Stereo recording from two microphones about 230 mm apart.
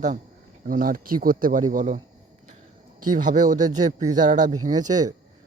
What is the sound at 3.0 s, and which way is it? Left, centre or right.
Speech, right.